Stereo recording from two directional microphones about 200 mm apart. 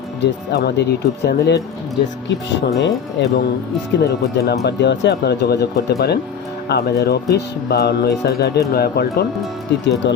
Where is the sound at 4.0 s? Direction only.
55° left (ahead or behind).